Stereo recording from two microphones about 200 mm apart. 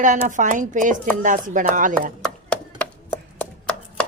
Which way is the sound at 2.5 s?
5° left (ahead or behind).